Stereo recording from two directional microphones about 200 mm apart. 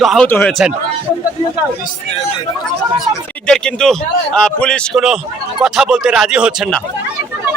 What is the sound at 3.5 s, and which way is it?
A man's voice, 5° left (ahead or behind).